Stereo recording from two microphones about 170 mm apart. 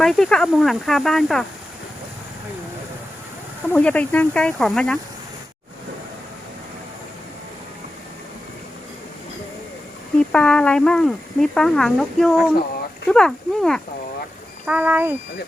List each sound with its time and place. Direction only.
0.0 s speech: centre (ahead or behind)
3.7 s speech: 10° left (ahead or behind)
10.2 s speech: 5° left (ahead or behind)
14.7 s speech: 10° right (ahead or behind)